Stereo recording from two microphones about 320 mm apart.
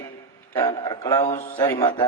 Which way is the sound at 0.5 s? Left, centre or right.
Centre.